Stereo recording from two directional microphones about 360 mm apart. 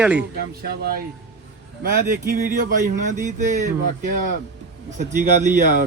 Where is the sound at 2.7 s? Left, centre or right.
Centre.